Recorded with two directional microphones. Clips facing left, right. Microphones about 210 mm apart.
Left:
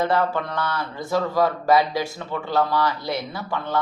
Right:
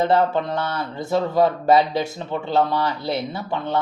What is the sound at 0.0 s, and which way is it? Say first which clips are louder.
Speech: right 3 dB; 25° right (ahead or behind).